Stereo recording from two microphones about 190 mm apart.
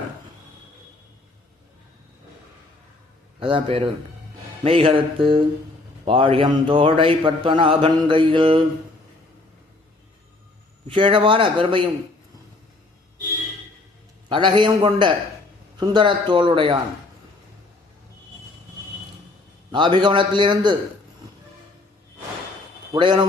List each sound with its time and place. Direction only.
3.4 s speech: 30° right (ahead or behind)
10.8 s speech: 25° right (ahead or behind)
14.3 s speech: 25° right (ahead or behind)
19.7 s speech: 25° right (ahead or behind)
22.9 s speech: 25° right (ahead or behind)